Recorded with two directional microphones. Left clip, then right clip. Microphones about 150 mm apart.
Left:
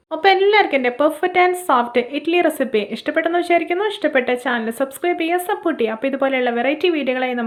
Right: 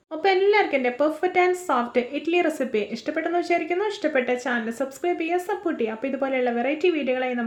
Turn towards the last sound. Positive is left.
turn(degrees=30)  # may be behind; listen again after turning